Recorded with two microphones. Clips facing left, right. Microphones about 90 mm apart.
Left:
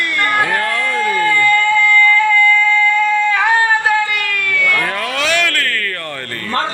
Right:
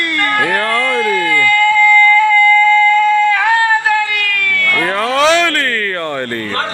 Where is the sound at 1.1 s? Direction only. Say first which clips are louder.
Left 2 dB; 30° left (ahead or behind).